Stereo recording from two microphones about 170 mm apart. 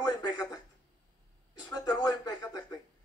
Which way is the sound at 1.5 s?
25° left (ahead or behind).